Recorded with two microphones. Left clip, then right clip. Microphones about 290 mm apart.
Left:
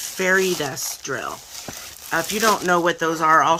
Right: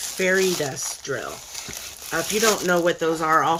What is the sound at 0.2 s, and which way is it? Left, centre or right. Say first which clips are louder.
Speech: left 2 dB; centre.